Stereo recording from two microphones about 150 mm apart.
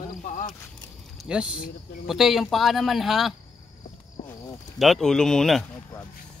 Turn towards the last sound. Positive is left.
turn(degrees=5)  # may be behind; listen again after turning